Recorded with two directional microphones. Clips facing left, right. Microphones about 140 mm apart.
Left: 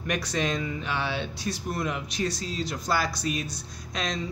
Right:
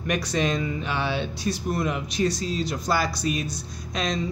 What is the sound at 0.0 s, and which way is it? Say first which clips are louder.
Speech: right 3 dB; 20° right (ahead or behind).